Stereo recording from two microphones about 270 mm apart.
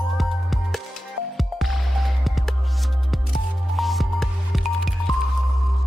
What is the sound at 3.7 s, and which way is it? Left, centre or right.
Music, centre.